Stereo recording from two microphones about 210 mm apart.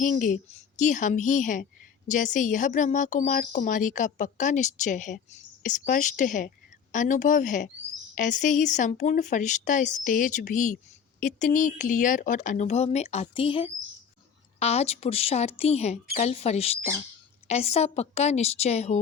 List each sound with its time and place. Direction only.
0.0 s a woman's voice: 35° left (ahead or behind)